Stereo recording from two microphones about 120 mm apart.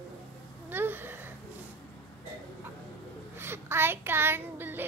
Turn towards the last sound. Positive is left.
turn(degrees=-15)  # may be behind; listen again after turning